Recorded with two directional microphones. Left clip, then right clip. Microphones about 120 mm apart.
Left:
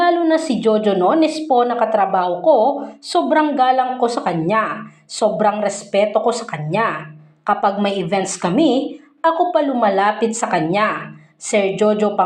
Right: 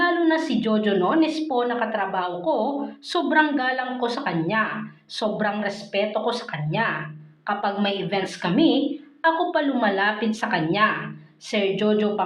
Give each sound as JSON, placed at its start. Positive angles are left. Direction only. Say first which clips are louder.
{"t": 0.3, "sound": "a woman's voice", "louder": "left 6 dB", "side_deg": 45}
{"t": 3.1, "sound": "a woman's voice", "louder": "left 5 dB", "side_deg": 30}
{"t": 3.9, "sound": "a woman's voice", "louder": "left 7 dB", "side_deg": 30}
{"t": 6.7, "sound": "a woman's voice", "louder": "left 6 dB", "side_deg": 50}
{"t": 9.2, "sound": "a woman's voice", "louder": "left 6 dB", "side_deg": 25}
{"t": 9.9, "sound": "a woman's voice", "louder": "left 6 dB", "side_deg": 35}